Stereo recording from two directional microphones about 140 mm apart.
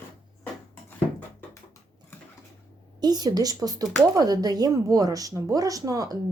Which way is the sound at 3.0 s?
30° right (ahead or behind).